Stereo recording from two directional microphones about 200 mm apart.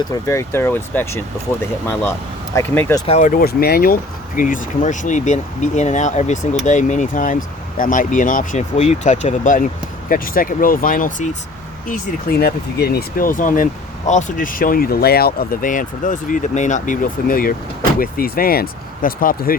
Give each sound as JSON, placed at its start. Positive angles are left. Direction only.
{"t": 0.1, "sound": "speech", "side_deg": 15}
{"t": 3.1, "sound": "speech", "side_deg": 40}
{"t": 12.4, "sound": "speech", "side_deg": 50}